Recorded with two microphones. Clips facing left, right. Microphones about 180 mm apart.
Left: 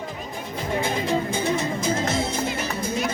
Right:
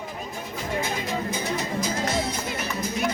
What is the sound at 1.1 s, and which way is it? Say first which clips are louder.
Music: left 5 dB; 30° left (ahead or behind).